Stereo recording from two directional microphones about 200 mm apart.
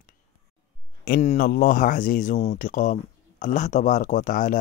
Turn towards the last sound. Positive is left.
turn(degrees=40)  # may be behind; listen again after turning